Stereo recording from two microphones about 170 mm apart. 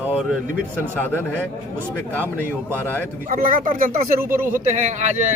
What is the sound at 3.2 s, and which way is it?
Speech, 55° right (ahead or behind).